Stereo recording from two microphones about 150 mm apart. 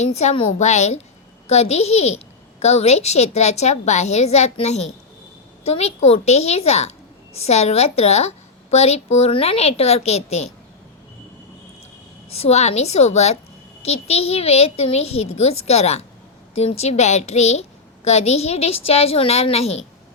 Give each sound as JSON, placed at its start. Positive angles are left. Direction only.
{"t": 0.0, "sound": "a woman's voice", "side_deg": 45}
{"t": 12.3, "sound": "a woman's voice", "side_deg": 45}